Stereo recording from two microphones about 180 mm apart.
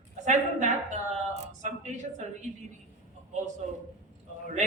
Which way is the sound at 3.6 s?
45° right (ahead or behind).